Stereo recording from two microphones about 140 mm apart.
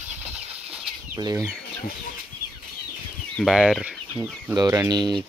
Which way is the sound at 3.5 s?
Centre (ahead or behind).